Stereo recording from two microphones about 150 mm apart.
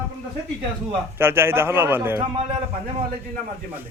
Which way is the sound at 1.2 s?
15° right (ahead or behind).